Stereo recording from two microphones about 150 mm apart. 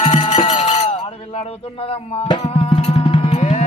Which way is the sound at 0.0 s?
45° left (ahead or behind).